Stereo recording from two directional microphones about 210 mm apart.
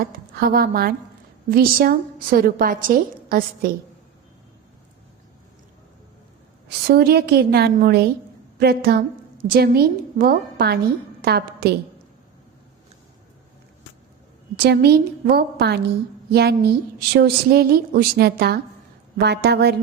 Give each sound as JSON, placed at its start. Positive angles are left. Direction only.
{"t": 0.0, "sound": "a woman's voice", "side_deg": -45}
{"t": 6.7, "sound": "a woman's voice", "side_deg": -50}
{"t": 14.5, "sound": "a woman's voice", "side_deg": -50}